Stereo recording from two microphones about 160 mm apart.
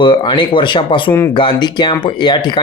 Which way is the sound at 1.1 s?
15° left (ahead or behind).